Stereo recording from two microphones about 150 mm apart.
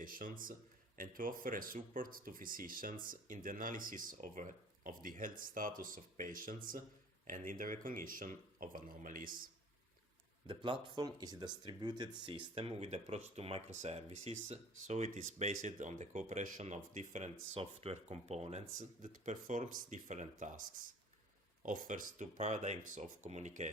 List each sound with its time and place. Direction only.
0.0 s speech: 65° right (ahead or behind)
10.4 s speech: 35° right (ahead or behind); by 17.3 s 55° right (ahead or behind)
17.5 s speech: 40° right (ahead or behind)
18.8 s speech: 60° right (ahead or behind)